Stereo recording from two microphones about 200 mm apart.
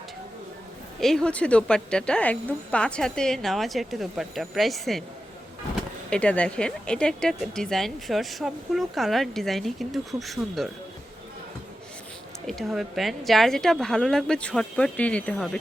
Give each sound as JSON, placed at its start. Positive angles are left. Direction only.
{"t": 0.9, "sound": "speech", "side_deg": 0}
{"t": 6.1, "sound": "speech", "side_deg": 5}
{"t": 12.5, "sound": "speech", "side_deg": 0}